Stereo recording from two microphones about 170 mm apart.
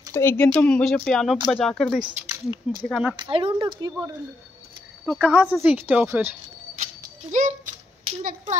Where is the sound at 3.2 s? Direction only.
30° right (ahead or behind).